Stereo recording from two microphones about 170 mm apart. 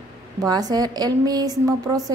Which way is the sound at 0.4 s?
20° right (ahead or behind).